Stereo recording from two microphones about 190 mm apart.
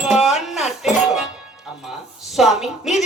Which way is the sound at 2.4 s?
5° right (ahead or behind).